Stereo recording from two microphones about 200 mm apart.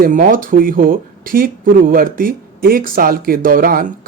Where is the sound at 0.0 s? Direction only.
40° right (ahead or behind).